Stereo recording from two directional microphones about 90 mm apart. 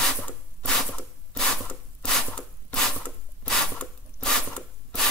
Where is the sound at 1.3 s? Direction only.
10° left (ahead or behind).